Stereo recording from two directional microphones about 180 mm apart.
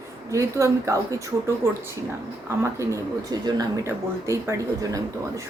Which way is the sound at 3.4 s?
20° right (ahead or behind).